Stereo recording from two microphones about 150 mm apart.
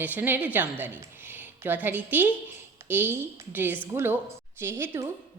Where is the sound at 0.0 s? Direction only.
10° right (ahead or behind).